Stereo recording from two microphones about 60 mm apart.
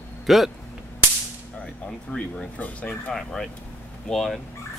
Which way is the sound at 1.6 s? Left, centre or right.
Centre.